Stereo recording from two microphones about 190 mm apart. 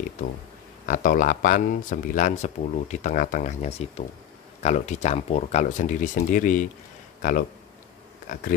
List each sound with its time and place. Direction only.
0.8 s speech: 40° left (ahead or behind)